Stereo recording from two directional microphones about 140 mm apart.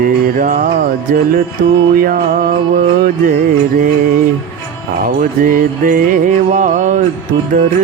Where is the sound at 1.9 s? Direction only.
90° right.